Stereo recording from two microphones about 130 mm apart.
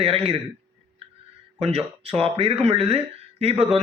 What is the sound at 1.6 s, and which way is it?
A man's voice, 50° right (ahead or behind).